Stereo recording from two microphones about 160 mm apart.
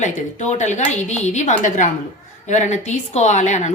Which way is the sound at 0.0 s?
50° left (ahead or behind).